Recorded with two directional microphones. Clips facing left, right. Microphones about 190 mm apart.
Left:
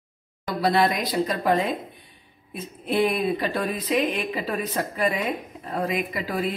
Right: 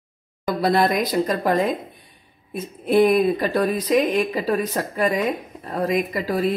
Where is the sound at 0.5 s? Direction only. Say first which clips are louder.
Right 3 dB; 45° right (ahead or behind).